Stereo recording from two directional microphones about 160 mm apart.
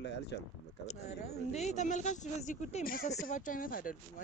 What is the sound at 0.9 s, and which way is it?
Speech, 45° left (ahead or behind).